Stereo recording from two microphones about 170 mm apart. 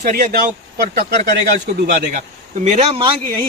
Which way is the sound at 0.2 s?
50° right (ahead or behind).